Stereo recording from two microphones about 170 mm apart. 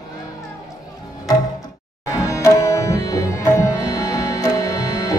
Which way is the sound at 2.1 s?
20° left (ahead or behind).